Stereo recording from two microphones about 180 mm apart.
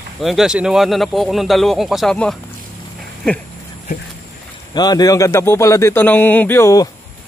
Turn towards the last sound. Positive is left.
turn(degrees=15)  # may be behind; listen again after turning